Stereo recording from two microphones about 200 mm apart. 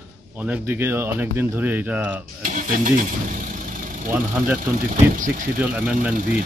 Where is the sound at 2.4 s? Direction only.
40° right (ahead or behind).